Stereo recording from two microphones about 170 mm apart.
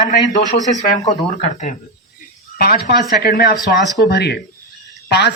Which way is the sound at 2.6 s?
60° left (ahead or behind).